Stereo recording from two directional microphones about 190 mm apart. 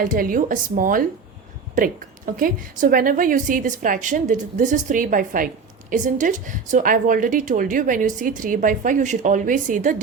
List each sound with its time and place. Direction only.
0.0 s a woman's voice: 45° right (ahead or behind)